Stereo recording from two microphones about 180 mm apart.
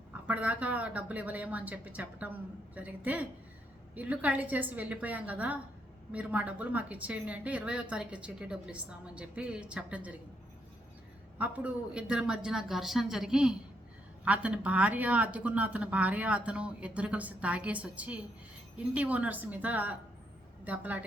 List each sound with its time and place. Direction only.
0.3 s a woman's voice: 10° right (ahead or behind)
11.3 s a woman's voice: 10° right (ahead or behind)